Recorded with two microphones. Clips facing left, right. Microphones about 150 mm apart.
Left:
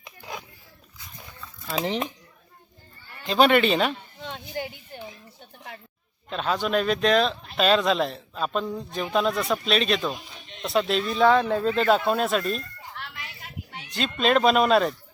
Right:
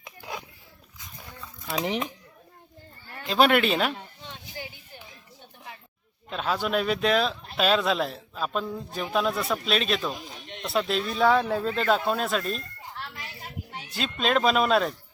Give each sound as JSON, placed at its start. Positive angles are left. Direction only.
{"t": 0.2, "sound": "biting", "side_deg": 0}
{"t": 1.6, "sound": "speech", "side_deg": -10}
{"t": 3.2, "sound": "a man's voice", "side_deg": -5}
{"t": 6.3, "sound": "a man's voice", "side_deg": -5}
{"t": 13.0, "sound": "a sound", "side_deg": -35}
{"t": 13.9, "sound": "a man's voice", "side_deg": 0}